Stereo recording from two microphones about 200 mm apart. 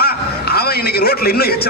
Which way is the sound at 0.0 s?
50° left (ahead or behind).